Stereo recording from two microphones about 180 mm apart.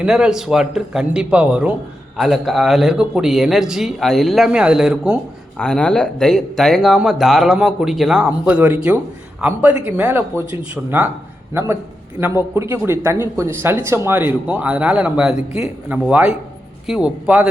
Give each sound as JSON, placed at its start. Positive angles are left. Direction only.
{"t": 0.0, "sound": "speech", "side_deg": -5}
{"t": 12.5, "sound": "speech", "side_deg": -15}
{"t": 15.4, "sound": "speech", "side_deg": 35}
{"t": 15.9, "sound": "speech", "side_deg": -5}